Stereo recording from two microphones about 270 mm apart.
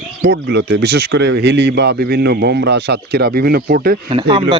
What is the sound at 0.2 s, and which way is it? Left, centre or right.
Speech, right.